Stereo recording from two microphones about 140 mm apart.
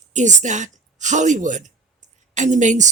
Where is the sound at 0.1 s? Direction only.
60° right (ahead or behind).